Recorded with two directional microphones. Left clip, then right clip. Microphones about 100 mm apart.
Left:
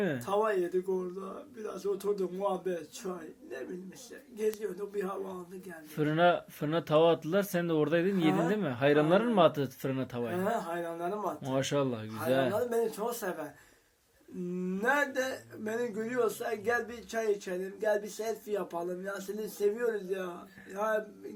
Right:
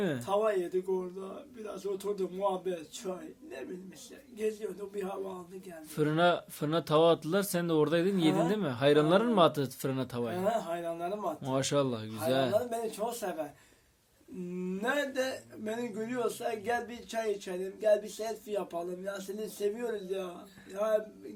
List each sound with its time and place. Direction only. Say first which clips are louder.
0.0 s speech: left 1 dB; 45° right (ahead or behind)
0.3 s a man's voice: even; 10° right (ahead or behind)
4.4 s speech: left 2 dB; 5° right (ahead or behind)
6.0 s speech: left 1 dB; 40° right (ahead or behind)
10.4 s speech: right 3 dB; centre (ahead or behind)
11.4 s speech: right 1 dB; 40° right (ahead or behind)
12.5 s speech: left 1 dB; centre (ahead or behind)
14.8 s a man's voice: left 3 dB; 5° right (ahead or behind)